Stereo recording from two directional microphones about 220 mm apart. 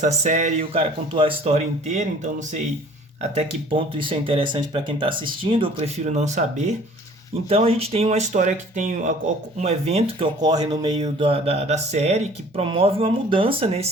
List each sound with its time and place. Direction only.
0.0 s speech: 35° right (ahead or behind)